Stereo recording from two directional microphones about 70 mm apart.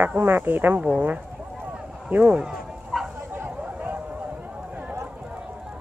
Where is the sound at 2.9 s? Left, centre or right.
Centre.